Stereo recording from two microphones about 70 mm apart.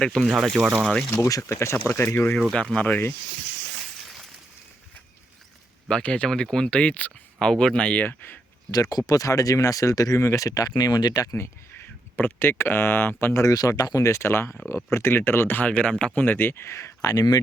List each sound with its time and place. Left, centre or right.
0.3 s speech: centre
0.8 s speech: centre
1.4 s speech: left
1.7 s speech: left
2.3 s speech: centre
2.7 s speech: left
5.9 s speech: centre
7.3 s speech: centre
8.0 s speech: left
8.7 s speech: left
10.8 s speech: left
12.1 s speech: left
13.5 s speech: left; by 16.1 s centre
16.1 s speech: left